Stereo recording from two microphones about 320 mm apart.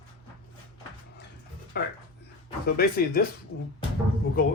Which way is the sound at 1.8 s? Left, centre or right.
Left.